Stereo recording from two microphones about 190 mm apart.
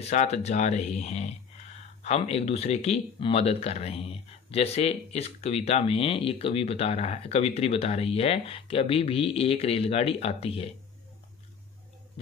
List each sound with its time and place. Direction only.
0.1 s speech: 35° left (ahead or behind)